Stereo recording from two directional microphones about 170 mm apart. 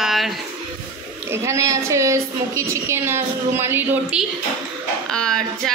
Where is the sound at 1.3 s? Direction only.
15° right (ahead or behind).